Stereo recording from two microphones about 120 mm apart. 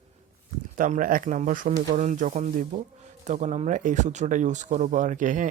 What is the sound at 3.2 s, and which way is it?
Speech, 80° right.